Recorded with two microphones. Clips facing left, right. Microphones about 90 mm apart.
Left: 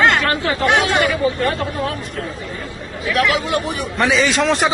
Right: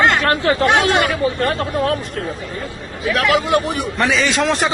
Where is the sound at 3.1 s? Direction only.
35° right (ahead or behind).